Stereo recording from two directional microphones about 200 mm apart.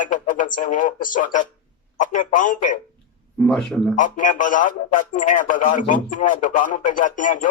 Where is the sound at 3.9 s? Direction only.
40° left (ahead or behind).